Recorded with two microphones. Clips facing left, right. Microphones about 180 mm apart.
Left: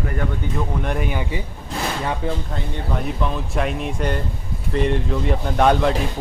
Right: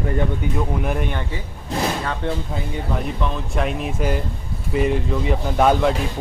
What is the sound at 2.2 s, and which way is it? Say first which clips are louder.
Speech: right 1 dB; 5° right (ahead or behind).